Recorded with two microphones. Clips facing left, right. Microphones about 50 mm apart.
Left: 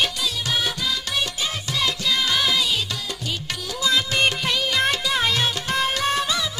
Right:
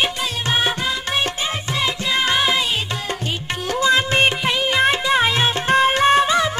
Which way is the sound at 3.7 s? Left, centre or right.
Right.